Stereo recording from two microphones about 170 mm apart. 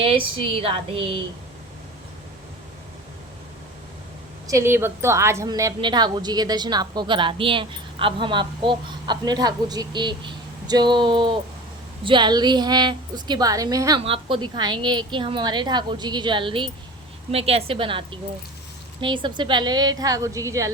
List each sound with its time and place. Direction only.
0.0 s a woman's voice: 35° right (ahead or behind)
4.4 s a woman's voice: 15° right (ahead or behind)
14.0 s a woman's voice: 30° right (ahead or behind)